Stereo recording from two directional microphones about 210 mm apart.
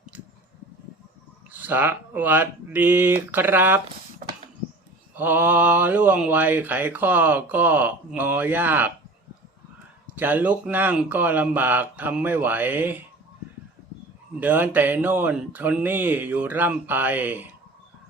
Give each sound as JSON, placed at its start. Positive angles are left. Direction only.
{"t": 1.5, "sound": "speech", "side_deg": -10}
{"t": 5.1, "sound": "speech", "side_deg": -10}
{"t": 10.2, "sound": "speech", "side_deg": -10}
{"t": 14.3, "sound": "speech", "side_deg": -10}